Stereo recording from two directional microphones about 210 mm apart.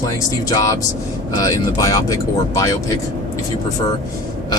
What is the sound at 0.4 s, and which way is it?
Speech, 15° left (ahead or behind).